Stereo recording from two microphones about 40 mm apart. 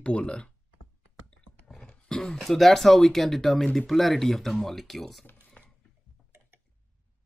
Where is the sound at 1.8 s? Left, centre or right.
Centre.